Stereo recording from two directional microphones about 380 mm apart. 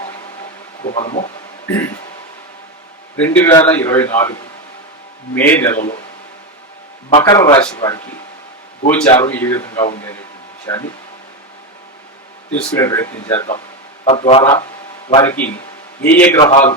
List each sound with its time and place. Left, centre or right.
0.9 s a man's voice: centre
1.6 s a man's voice: centre
3.2 s a man's voice: centre
7.1 s a man's voice: centre
12.7 s a man's voice: centre